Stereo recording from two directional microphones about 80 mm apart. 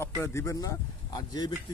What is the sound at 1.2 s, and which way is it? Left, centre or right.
Speech, left.